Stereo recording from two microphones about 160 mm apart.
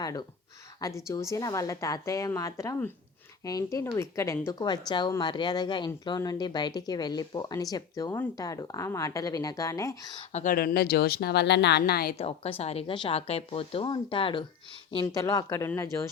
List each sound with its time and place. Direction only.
0.0 s speech: 25° left (ahead or behind)
10.3 s a woman's voice: 60° left (ahead or behind); by 12.1 s 75° left (ahead or behind)
12.1 s speech: 40° left (ahead or behind)
15.0 s speech: 20° left (ahead or behind)